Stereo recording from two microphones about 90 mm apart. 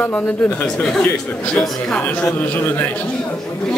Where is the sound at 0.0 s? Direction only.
20° left (ahead or behind).